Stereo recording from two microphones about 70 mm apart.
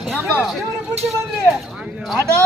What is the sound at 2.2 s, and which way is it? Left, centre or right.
Speech, right.